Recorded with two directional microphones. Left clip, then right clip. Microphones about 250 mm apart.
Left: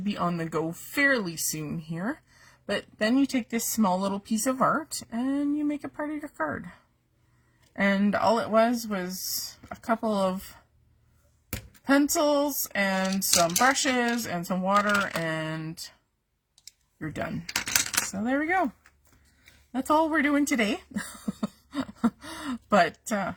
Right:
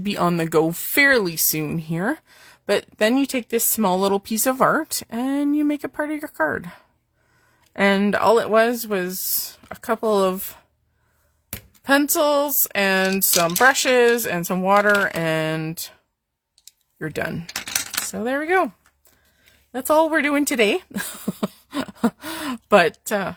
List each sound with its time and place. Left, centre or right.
0.0 s speech: right
7.8 s speech: right
11.9 s speech: right
17.7 s coin: centre
18.2 s speech: right
19.9 s speech: right